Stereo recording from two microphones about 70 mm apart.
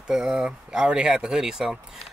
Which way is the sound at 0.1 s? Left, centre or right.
Centre.